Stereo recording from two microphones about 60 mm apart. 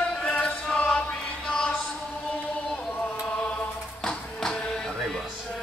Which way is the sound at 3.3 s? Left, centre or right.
Centre.